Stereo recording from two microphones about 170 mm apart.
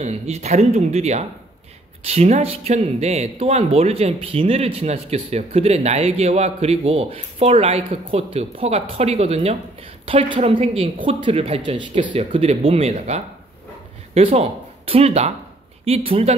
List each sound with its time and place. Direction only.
0.0 s speech: 40° right (ahead or behind)